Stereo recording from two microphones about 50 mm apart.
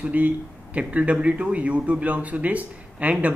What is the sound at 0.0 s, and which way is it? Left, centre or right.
A man's voice, right.